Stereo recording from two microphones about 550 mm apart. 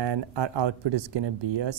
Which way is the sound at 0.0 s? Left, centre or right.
Right.